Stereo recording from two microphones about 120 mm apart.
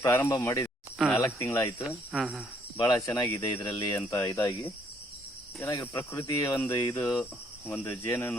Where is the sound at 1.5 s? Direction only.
25° left (ahead or behind).